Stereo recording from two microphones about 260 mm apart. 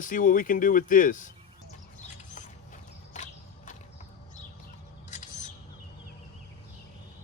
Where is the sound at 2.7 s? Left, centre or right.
Left.